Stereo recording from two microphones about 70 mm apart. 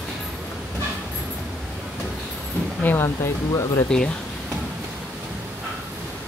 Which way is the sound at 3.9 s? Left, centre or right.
Centre.